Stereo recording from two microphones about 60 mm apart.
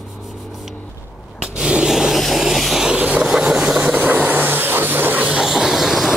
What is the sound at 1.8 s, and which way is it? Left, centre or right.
Vehicle, centre.